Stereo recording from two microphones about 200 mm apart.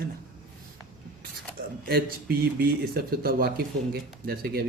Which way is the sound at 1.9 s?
50° right (ahead or behind).